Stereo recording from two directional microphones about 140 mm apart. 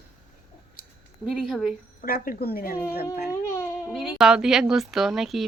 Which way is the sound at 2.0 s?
90° left.